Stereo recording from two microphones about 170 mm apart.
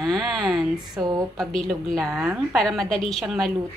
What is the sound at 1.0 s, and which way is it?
Speech, 20° right (ahead or behind).